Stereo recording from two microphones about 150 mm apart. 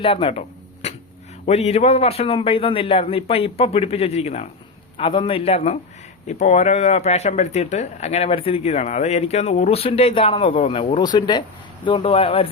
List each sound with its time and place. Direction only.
0.0 s a sound: 35° left (ahead or behind)
1.5 s a man's voice: 45° left (ahead or behind)
4.9 s a man's voice: 35° left (ahead or behind)